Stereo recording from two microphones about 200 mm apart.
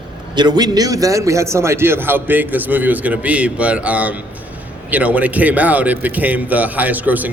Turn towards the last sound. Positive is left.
turn(degrees=-10)  # may be behind; listen again after turning